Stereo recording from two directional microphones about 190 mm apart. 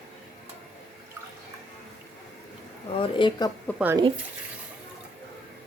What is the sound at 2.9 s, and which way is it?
Speech, 25° left (ahead or behind).